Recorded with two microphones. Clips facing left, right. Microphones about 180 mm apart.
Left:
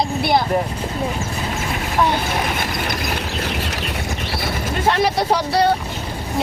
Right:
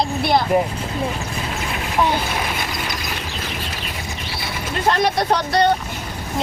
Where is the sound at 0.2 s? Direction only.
5° left (ahead or behind).